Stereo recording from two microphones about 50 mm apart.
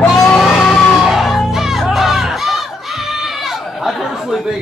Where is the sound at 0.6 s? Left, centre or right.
Centre.